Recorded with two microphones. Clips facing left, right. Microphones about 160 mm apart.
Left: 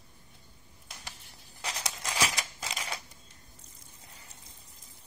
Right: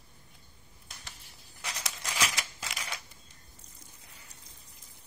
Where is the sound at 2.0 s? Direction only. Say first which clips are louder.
Left 2 dB; 20° left (ahead or behind).